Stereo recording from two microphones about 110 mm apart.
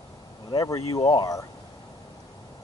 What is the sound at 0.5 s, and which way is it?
Speech, 35° left (ahead or behind).